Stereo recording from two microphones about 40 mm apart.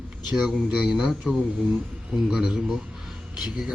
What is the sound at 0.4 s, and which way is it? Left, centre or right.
Speech, centre.